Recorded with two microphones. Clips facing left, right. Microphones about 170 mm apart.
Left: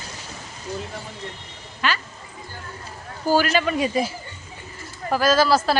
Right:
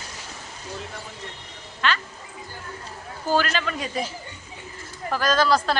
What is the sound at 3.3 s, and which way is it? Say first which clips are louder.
Speech: left 4 dB; 10° left (ahead or behind).